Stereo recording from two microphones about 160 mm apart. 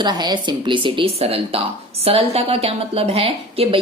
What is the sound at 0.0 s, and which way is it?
A woman's voice, 25° right (ahead or behind).